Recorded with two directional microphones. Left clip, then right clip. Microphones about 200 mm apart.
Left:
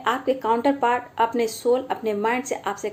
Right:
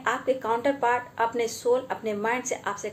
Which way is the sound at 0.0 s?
40° left (ahead or behind).